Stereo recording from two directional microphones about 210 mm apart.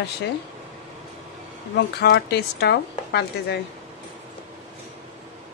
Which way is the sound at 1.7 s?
55° left (ahead or behind).